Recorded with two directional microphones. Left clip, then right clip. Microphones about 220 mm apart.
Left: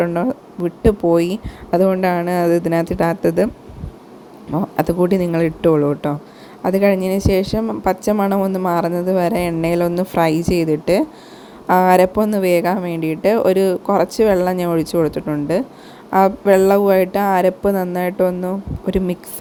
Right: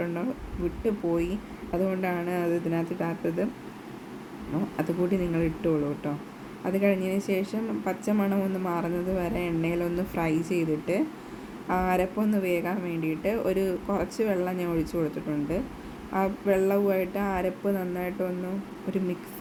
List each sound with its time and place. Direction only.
0.0 s a woman's voice: 30° left (ahead or behind)
4.5 s a woman's voice: 30° left (ahead or behind)